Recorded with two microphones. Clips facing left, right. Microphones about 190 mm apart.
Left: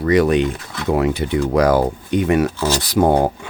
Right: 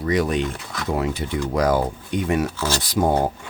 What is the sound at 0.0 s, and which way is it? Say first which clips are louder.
Speech: left 6 dB; 70° left (ahead or behind).